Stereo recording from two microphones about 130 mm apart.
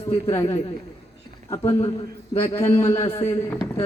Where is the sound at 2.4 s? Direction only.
20° left (ahead or behind).